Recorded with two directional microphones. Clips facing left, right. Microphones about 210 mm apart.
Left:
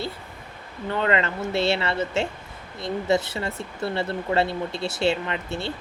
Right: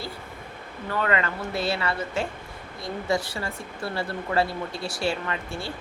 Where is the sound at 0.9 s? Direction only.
25° left (ahead or behind).